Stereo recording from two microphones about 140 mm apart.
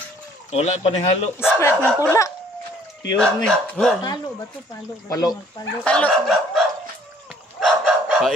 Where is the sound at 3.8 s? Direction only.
5° left (ahead or behind).